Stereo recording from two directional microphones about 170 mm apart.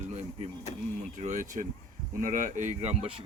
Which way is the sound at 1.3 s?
50° right (ahead or behind).